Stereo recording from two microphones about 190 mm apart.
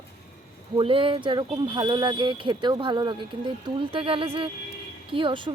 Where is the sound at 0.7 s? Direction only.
25° right (ahead or behind).